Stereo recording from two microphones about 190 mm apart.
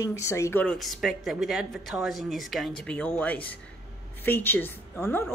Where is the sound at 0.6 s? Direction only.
Centre (ahead or behind).